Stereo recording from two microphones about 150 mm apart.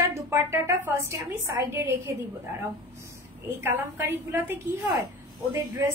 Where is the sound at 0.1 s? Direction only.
20° right (ahead or behind).